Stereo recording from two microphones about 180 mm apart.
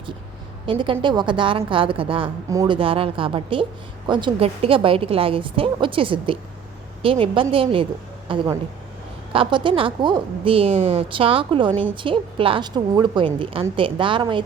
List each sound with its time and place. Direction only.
0.6 s a woman's voice: 30° right (ahead or behind)
2.5 s a woman's voice: 20° right (ahead or behind)
2.7 s a woman's voice: 30° right (ahead or behind)